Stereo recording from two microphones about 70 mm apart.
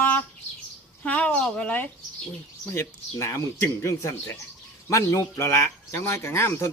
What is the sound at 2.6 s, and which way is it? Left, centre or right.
Speech, left.